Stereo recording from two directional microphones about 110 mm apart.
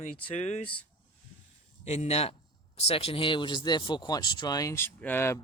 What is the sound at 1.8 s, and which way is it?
Speech, 85° left.